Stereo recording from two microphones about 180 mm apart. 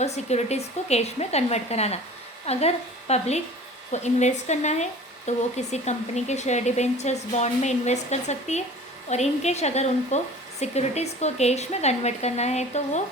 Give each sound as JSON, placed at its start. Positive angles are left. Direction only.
{"t": 0.0, "sound": "speech", "side_deg": 40}